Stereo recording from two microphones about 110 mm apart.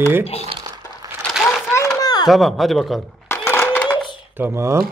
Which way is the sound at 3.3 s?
15° left (ahead or behind).